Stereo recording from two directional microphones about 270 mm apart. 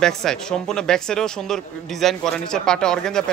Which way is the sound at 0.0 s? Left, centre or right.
Centre.